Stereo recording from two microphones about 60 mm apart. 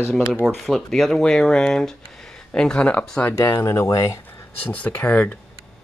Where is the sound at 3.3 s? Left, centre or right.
Left.